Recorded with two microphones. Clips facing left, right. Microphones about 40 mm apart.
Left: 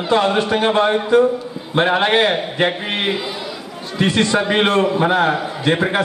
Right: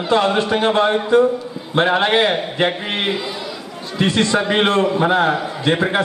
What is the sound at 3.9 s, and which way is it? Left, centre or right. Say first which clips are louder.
A man's voice: even; left.